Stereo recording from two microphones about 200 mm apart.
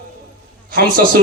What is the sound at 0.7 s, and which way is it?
Speech, 45° right (ahead or behind).